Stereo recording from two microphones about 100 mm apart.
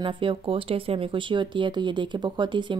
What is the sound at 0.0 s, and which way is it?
Speech, 55° right (ahead or behind).